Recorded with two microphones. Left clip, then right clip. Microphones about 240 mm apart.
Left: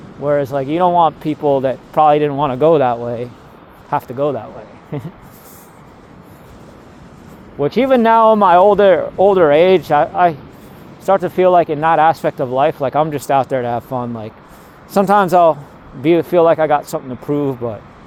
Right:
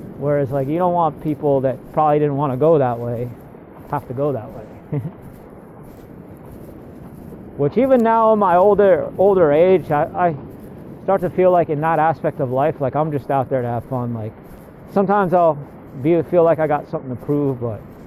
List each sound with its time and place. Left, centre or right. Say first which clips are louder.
0.2 s speech: left 3 dB; left
7.6 s speech: left 2 dB; left